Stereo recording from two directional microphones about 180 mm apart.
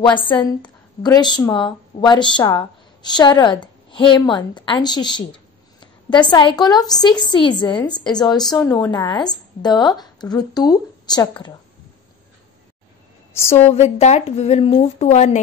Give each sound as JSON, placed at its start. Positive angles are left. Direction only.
{"t": 0.0, "sound": "a woman's voice", "side_deg": 25}
{"t": 13.3, "sound": "a woman's voice", "side_deg": 15}
{"t": 13.7, "sound": "speech", "side_deg": 35}